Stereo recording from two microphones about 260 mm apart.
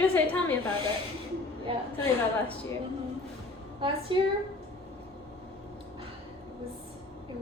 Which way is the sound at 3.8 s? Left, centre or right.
Centre.